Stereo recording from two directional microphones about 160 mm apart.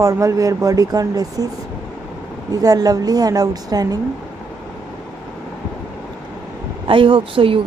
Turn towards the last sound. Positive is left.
turn(degrees=-35)  # may be behind; listen again after turning